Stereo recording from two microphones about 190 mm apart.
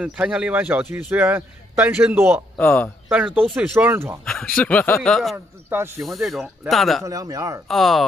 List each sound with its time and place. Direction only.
0.0 s a man's voice: 5° right (ahead or behind)
2.5 s speech: 5° left (ahead or behind)
3.3 s a man's voice: 10° right (ahead or behind)
4.2 s speech: 5° left (ahead or behind)
5.7 s a man's voice: 10° right (ahead or behind)
6.0 s speech: centre (ahead or behind)
7.1 s a man's voice: 20° right (ahead or behind)
7.6 s speech: centre (ahead or behind)